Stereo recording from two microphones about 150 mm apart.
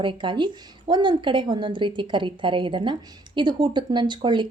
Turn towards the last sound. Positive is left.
turn(degrees=-30)  # may be behind; listen again after turning